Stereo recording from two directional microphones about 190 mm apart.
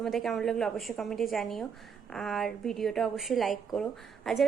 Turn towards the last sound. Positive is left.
turn(degrees=0)  # may be behind; listen again after turning